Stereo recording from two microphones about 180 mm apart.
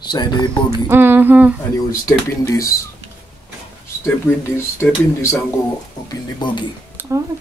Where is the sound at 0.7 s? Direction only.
15° right (ahead or behind).